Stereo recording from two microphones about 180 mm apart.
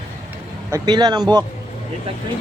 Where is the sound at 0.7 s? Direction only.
25° right (ahead or behind).